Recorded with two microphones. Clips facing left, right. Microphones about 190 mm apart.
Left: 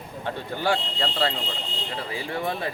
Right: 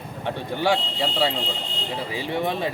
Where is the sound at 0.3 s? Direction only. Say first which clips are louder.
Right 3 dB; 10° right (ahead or behind).